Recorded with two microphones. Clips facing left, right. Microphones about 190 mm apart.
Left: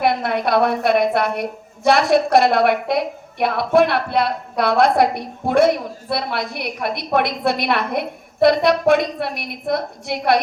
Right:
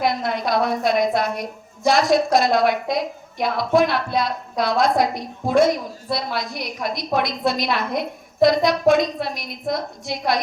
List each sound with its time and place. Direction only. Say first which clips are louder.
0.0 s a woman's voice: left 3 dB; 60° left (ahead or behind)